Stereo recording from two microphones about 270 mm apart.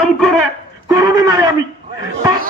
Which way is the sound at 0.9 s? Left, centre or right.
Centre.